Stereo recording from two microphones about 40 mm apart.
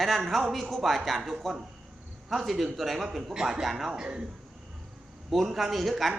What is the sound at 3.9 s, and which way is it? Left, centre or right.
Speech, centre.